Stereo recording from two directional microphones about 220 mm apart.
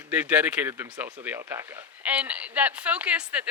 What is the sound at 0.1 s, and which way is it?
Speech, 5° right (ahead or behind).